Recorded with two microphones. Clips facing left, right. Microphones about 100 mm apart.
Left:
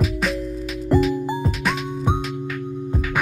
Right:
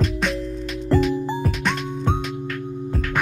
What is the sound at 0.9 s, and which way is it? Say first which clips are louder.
Music: left 1 dB; 15° left (ahead or behind).